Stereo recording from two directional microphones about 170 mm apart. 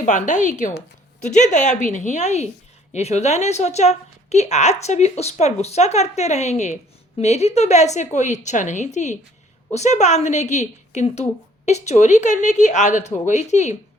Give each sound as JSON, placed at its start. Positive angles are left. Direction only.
{"t": 0.0, "sound": "a woman's voice", "side_deg": 45}